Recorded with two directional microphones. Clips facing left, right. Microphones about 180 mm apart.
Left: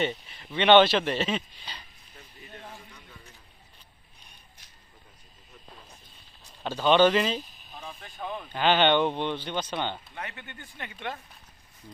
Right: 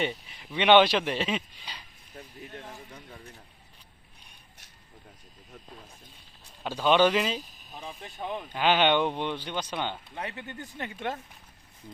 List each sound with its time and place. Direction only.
0.0 s speech: 5° right (ahead or behind)
6.6 s a sound: 5° right (ahead or behind)
8.0 s speech: 20° right (ahead or behind)
8.5 s speech: 5° right (ahead or behind)
10.2 s speech: 30° right (ahead or behind)